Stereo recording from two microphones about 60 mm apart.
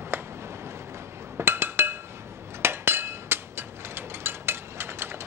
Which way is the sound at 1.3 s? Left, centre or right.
Right.